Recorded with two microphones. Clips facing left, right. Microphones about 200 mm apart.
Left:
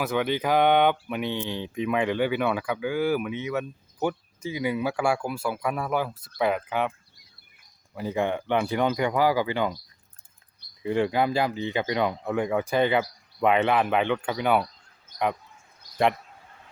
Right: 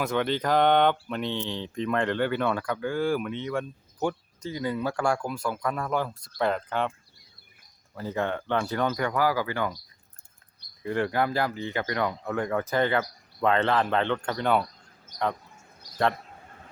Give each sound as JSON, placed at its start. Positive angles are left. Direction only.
{"t": 0.0, "sound": "speech", "side_deg": 5}
{"t": 7.9, "sound": "speech", "side_deg": 15}
{"t": 10.8, "sound": "speech", "side_deg": 15}